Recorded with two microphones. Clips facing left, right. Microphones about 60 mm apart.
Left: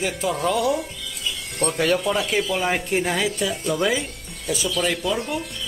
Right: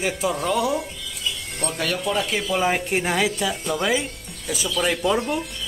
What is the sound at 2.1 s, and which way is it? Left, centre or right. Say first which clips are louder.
Speech: left 1 dB; centre.